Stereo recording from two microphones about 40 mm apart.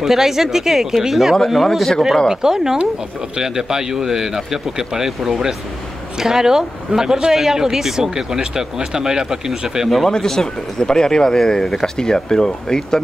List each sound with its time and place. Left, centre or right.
0.0 s speech: centre
2.2 s speech: centre
9.8 s speech: centre
10.1 s speech: centre